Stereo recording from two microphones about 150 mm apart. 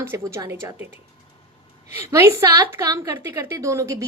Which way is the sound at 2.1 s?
20° right (ahead or behind).